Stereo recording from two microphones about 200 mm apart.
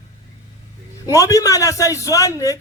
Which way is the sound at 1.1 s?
15° left (ahead or behind).